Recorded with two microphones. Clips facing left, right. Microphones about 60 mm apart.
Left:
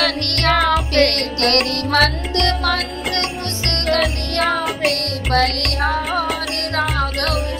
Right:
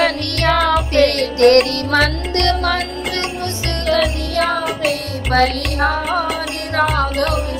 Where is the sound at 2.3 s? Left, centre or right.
Right.